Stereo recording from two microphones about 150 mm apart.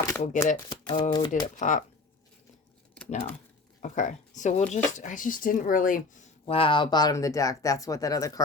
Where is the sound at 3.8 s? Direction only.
55° left (ahead or behind).